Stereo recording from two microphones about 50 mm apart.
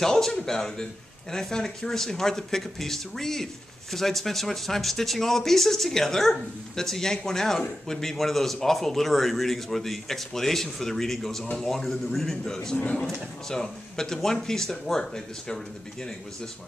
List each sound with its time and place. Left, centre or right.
0.0 s a man's voice: centre
12.7 s a man's voice: left
13.0 s speech: centre